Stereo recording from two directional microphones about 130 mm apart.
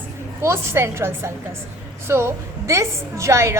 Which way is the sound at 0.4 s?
20° right (ahead or behind).